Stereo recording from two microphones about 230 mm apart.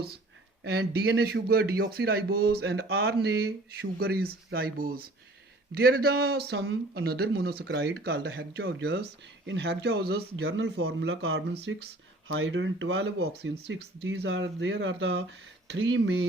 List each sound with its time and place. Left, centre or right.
0.6 s a man's voice: right
13.2 s a man's voice: right